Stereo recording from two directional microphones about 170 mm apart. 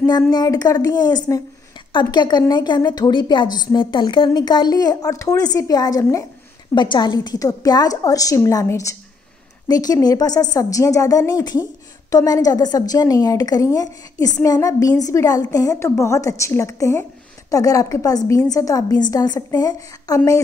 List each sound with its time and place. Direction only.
0.0 s a woman's voice: 20° left (ahead or behind)